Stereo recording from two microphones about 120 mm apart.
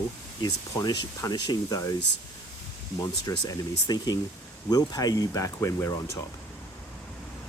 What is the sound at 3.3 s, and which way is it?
Speech, 30° left (ahead or behind).